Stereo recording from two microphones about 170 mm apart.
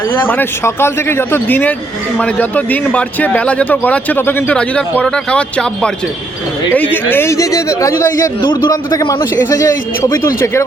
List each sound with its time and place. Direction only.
0.1 s a man's voice: 10° left (ahead or behind)